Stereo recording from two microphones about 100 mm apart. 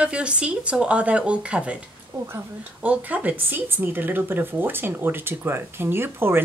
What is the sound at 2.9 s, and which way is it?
Speech, 15° right (ahead or behind).